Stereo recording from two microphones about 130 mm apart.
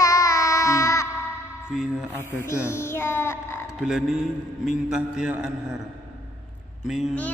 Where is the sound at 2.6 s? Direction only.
20° left (ahead or behind).